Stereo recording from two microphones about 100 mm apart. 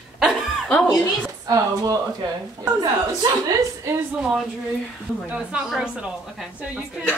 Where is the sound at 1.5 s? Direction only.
35° right (ahead or behind).